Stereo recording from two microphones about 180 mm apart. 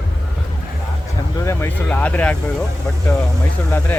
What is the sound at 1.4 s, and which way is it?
Speech, 15° left (ahead or behind).